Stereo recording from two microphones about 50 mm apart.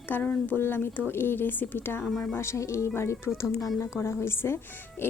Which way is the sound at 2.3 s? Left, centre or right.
Left.